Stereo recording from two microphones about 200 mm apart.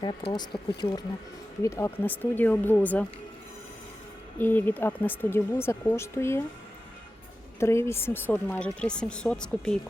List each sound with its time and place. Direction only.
0.3 s speech: 20° left (ahead or behind)
4.4 s speech: 10° left (ahead or behind)
7.6 s a woman's voice: 15° left (ahead or behind)